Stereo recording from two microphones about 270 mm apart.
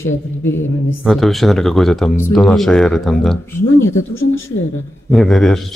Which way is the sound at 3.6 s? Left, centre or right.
Left.